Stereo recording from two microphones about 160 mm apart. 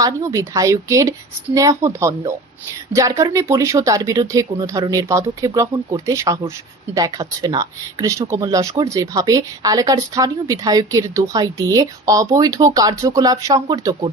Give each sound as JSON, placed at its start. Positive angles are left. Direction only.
{"t": 0.0, "sound": "speech", "side_deg": -20}